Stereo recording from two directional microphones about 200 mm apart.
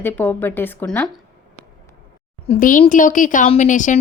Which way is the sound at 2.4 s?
35° left (ahead or behind).